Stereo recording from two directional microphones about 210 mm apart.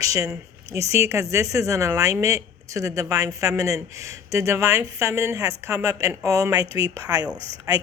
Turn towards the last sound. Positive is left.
turn(degrees=-15)  # may be behind; listen again after turning